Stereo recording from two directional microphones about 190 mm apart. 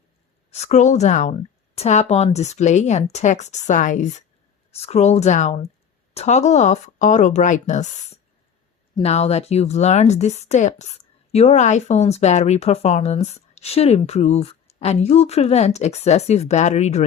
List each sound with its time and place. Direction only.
0.5 s a woman's voice: 35° left (ahead or behind)